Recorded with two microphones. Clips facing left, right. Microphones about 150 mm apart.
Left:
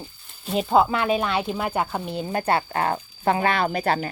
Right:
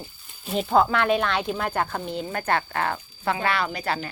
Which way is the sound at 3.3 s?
45° left (ahead or behind).